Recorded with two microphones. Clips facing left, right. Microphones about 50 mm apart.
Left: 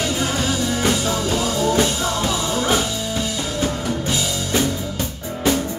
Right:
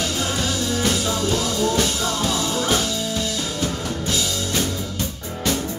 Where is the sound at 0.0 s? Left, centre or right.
Centre.